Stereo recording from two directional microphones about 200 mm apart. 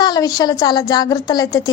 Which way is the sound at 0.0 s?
20° left (ahead or behind).